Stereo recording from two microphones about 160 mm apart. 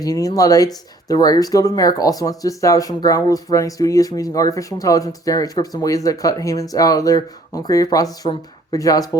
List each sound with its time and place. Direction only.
0.0 s speech: 20° left (ahead or behind)